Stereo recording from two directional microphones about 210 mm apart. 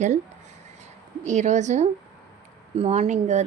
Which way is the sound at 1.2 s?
35° right (ahead or behind).